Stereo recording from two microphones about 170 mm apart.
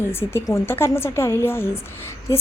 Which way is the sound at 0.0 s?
15° left (ahead or behind).